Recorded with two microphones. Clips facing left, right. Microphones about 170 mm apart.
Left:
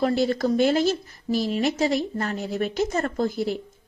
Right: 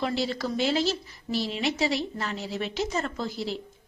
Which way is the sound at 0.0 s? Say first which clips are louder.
Left 7 dB; 50° left (ahead or behind).